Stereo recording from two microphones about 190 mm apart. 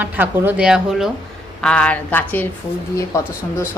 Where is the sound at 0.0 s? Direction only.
10° right (ahead or behind); by 2.5 s 10° left (ahead or behind).